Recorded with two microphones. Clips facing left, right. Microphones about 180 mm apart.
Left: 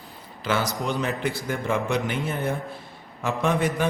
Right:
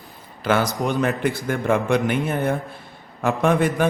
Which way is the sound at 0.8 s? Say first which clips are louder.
Right 5 dB; 55° right (ahead or behind).